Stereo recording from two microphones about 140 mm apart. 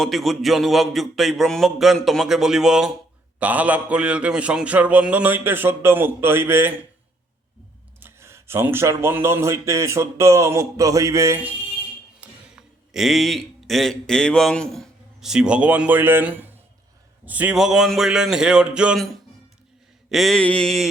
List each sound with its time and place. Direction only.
0.0 s a man's voice: centre (ahead or behind); by 6.7 s 15° right (ahead or behind)
7.9 s speech: 20° right (ahead or behind)
12.2 s music: 10° right (ahead or behind)
12.9 s a man's voice: centre (ahead or behind)